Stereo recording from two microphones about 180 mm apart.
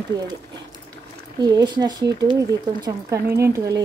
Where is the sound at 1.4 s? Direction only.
20° right (ahead or behind).